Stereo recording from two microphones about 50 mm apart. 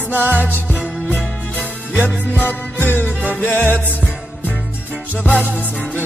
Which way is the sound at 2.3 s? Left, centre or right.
Left.